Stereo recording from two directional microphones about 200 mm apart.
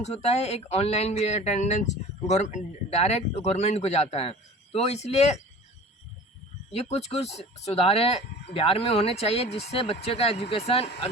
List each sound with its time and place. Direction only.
0.0 s speech: 30° left (ahead or behind)
6.9 s speech: 30° left (ahead or behind)